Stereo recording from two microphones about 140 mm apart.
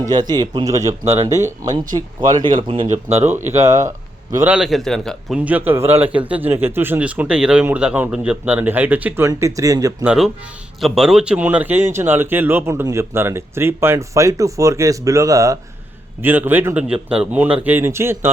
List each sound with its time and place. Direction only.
0.1 s speech: 30° right (ahead or behind)
2.3 s speech: 35° right (ahead or behind); by 3.3 s 55° right (ahead or behind)
3.5 s speech: 25° right (ahead or behind)
3.8 s a sound: 20° right (ahead or behind)
4.4 s a man's voice: 5° right (ahead or behind)
5.5 s speech: 15° right (ahead or behind)
10.0 s a man's voice: 5° right (ahead or behind)